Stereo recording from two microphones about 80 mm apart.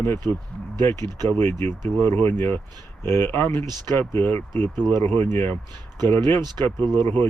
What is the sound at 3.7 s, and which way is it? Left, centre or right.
Speech, right.